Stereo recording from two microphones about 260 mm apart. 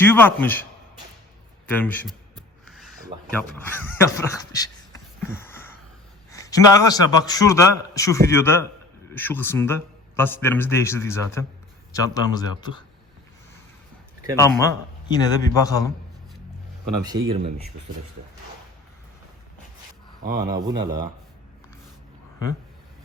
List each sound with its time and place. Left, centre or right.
0.0 s a man's voice: centre
1.6 s speech: centre
2.6 s a sound: centre
3.3 s a man's voice: centre
14.3 s a man's voice: centre
20.2 s speech: right
20.5 s speech: centre